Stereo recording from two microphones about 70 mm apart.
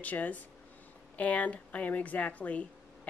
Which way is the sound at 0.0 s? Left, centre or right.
Left.